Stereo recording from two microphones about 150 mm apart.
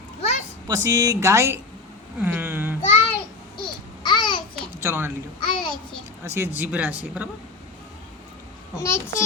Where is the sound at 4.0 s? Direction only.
30° left (ahead or behind).